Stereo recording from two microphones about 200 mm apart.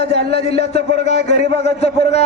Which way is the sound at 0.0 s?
30° left (ahead or behind).